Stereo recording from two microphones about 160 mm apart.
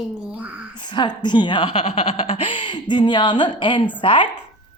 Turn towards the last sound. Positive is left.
turn(degrees=30)  # may be behind; listen again after turning